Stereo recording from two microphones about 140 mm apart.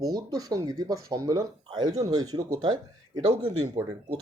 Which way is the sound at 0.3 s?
25° right (ahead or behind).